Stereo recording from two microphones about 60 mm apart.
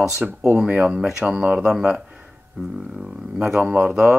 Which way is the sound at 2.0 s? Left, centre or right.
Centre.